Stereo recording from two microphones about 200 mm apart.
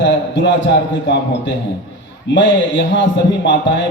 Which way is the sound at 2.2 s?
65° left (ahead or behind).